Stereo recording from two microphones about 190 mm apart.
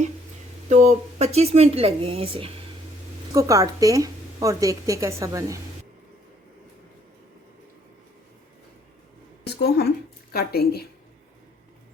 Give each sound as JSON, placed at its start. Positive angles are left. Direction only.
{"t": 0.7, "sound": "a woman's voice", "side_deg": -35}
{"t": 3.3, "sound": "a woman's voice", "side_deg": -15}
{"t": 9.4, "sound": "a sound", "side_deg": 60}
{"t": 10.3, "sound": "a woman's voice", "side_deg": 55}